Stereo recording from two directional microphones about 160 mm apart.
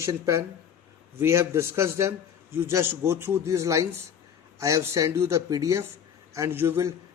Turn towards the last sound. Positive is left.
turn(degrees=-15)  # may be behind; listen again after turning